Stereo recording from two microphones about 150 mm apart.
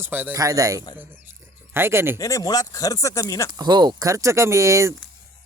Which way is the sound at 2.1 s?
25° left (ahead or behind).